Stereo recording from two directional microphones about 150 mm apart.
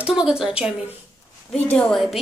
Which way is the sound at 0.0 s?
5° right (ahead or behind).